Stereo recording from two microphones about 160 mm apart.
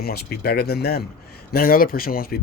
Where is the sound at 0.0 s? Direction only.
80° left.